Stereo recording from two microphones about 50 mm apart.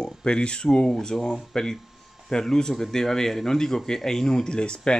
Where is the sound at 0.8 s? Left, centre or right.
Centre.